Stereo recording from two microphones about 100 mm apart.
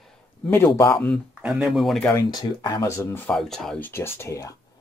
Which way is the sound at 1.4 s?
5° right (ahead or behind).